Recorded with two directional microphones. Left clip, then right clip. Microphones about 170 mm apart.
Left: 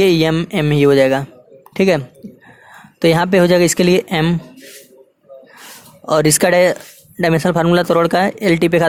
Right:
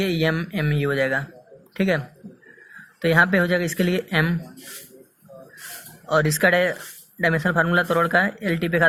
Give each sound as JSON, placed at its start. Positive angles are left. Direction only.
{"t": 0.0, "sound": "speech", "side_deg": 55}
{"t": 3.0, "sound": "speech", "side_deg": 50}
{"t": 6.1, "sound": "speech", "side_deg": 55}